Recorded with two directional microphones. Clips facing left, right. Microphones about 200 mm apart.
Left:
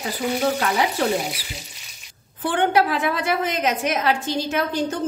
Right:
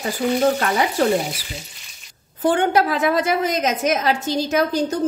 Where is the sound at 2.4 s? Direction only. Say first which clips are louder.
Right 2 dB; 45° right (ahead or behind).